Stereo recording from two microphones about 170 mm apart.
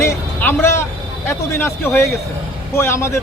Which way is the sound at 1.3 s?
15° left (ahead or behind).